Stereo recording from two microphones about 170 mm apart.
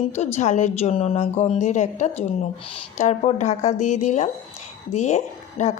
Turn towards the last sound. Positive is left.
turn(degrees=45)  # may be behind; listen again after turning